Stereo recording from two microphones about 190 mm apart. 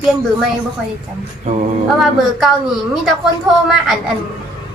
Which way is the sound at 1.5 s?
35° right (ahead or behind).